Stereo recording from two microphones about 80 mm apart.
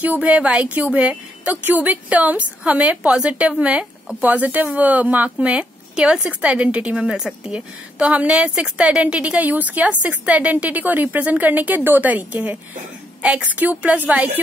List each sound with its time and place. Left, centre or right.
0.0 s a woman's voice: centre